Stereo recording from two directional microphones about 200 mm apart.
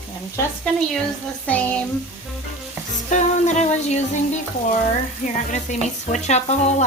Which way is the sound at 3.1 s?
35° left (ahead or behind).